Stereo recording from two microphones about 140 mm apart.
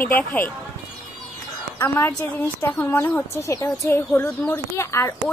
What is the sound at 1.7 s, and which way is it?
A woman's voice, 15° left (ahead or behind).